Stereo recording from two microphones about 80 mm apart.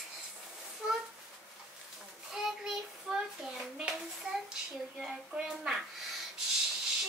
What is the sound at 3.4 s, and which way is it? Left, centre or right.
Hands, centre.